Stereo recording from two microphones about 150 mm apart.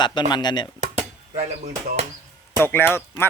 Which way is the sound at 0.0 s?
30° left (ahead or behind).